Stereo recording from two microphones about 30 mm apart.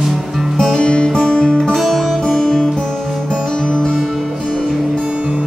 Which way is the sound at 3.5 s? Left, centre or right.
Left.